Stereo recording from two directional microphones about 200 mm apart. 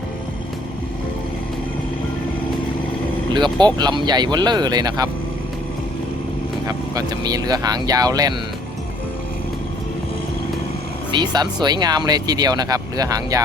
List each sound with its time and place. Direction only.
3.3 s speech: 20° right (ahead or behind)
6.7 s speech: 20° right (ahead or behind)
11.1 s speech: 20° right (ahead or behind)